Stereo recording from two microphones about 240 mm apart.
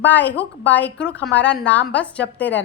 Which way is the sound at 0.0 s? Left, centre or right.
Centre.